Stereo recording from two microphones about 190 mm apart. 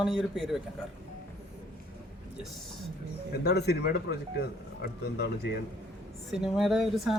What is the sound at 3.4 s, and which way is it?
Speech, 60° left (ahead or behind).